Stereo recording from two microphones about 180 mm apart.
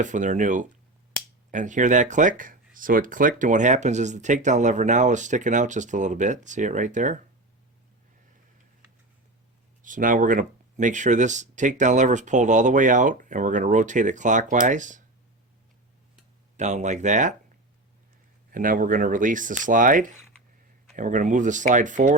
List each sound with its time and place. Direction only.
0.0 s speech: 45° right (ahead or behind)
9.8 s speech: 45° right (ahead or behind)
16.6 s speech: 40° right (ahead or behind)
18.5 s speech: 50° right (ahead or behind)